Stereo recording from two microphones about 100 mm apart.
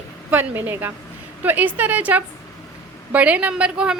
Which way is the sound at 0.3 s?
20° right (ahead or behind).